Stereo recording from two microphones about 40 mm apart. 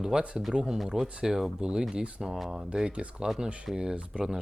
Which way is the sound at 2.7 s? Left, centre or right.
Right.